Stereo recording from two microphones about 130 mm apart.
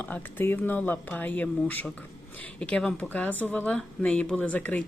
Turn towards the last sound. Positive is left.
turn(degrees=10)  # may be behind; listen again after turning